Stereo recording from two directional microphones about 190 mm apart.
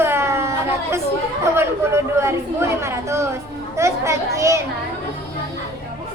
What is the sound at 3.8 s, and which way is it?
Speech, 15° right (ahead or behind).